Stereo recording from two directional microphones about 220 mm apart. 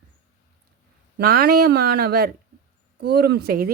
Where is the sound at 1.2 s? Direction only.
45° right (ahead or behind).